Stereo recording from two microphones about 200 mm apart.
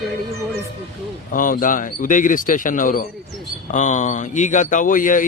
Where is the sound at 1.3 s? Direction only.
45° left (ahead or behind).